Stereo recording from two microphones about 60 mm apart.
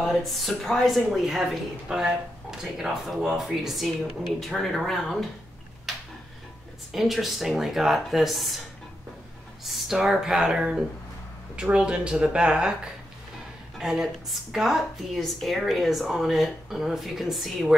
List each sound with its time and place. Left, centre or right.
0.0 s speech: centre
5.9 s a sound: centre
6.9 s speech: centre
9.7 s speech: centre